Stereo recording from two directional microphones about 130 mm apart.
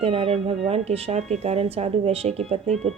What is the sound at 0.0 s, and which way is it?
Speech, 45° right (ahead or behind).